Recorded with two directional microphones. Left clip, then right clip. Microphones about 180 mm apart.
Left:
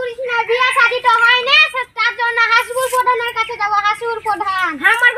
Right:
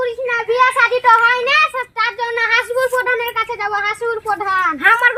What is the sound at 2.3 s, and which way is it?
Speech, 35° right (ahead or behind).